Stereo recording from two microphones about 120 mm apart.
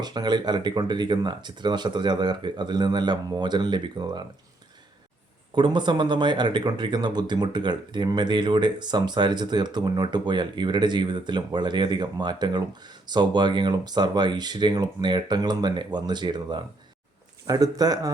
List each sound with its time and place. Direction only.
0.0 s speech: 35° right (ahead or behind)
5.5 s speech: 40° right (ahead or behind)